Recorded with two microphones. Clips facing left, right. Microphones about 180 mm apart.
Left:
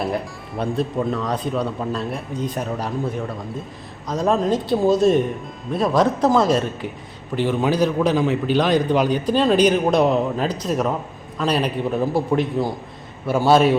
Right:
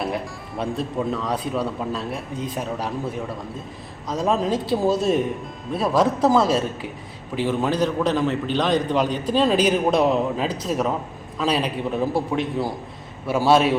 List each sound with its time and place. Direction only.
0.0 s a man's voice: centre (ahead or behind)
4.1 s a man's voice: 5° right (ahead or behind)